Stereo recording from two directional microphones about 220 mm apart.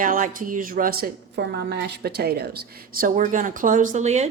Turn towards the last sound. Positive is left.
turn(degrees=-30)  # may be behind; listen again after turning